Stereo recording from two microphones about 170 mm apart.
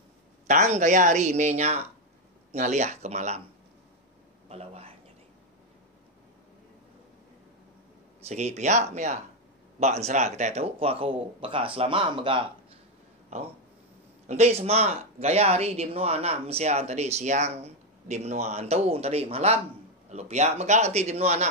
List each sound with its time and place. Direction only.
0.5 s speech: 45° right (ahead or behind)
4.5 s speech: 35° right (ahead or behind)
8.3 s speech: 40° right (ahead or behind)
14.2 s speech: 40° right (ahead or behind)